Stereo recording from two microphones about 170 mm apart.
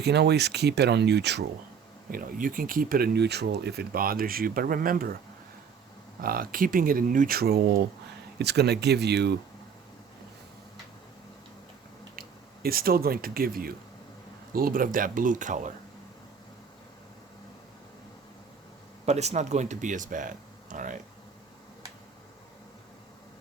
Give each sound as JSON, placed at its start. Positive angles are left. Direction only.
{"t": 0.0, "sound": "speech", "side_deg": -75}
{"t": 2.0, "sound": "speech", "side_deg": -55}
{"t": 6.2, "sound": "speech", "side_deg": -55}
{"t": 12.6, "sound": "speech", "side_deg": -60}
{"t": 19.0, "sound": "speech", "side_deg": -40}